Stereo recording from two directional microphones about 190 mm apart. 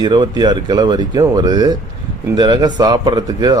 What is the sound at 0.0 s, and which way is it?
Speech, 25° right (ahead or behind).